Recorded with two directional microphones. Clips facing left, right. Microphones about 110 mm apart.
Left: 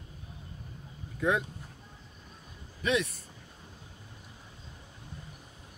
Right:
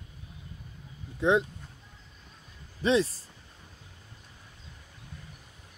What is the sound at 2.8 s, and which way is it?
Speech, 30° right (ahead or behind).